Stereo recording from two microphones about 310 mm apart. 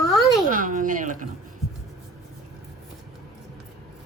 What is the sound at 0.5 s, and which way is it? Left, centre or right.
Speech, right.